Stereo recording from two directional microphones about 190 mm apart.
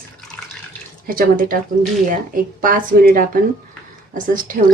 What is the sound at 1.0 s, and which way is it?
Speech, 45° right (ahead or behind).